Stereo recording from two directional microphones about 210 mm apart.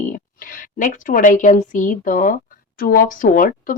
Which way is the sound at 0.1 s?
40° left (ahead or behind).